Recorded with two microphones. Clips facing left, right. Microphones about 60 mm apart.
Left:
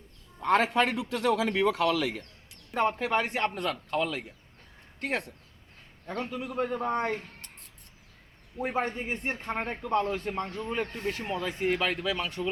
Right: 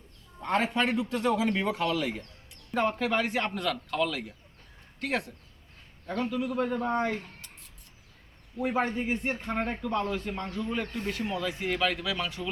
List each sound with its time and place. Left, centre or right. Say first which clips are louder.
0.4 s a man's voice: left 3 dB; left
3.0 s a man's voice: even; left
6.8 s speech: even; left
8.5 s speech: right 2 dB; left
9.6 s a man's voice: right 2 dB; centre
9.9 s speech: left 7 dB; left